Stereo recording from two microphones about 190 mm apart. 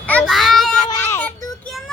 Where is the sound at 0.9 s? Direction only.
10° left (ahead or behind).